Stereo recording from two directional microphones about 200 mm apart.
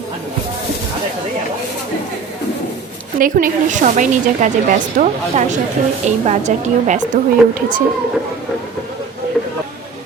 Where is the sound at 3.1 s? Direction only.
45° right (ahead or behind).